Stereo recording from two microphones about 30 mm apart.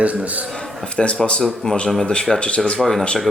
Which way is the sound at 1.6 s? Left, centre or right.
Left.